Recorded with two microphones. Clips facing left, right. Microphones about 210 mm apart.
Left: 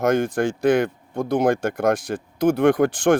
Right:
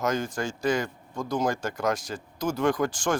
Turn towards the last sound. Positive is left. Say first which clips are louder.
# left 8 dB
turn(degrees=60)  # may be behind; listen again after turning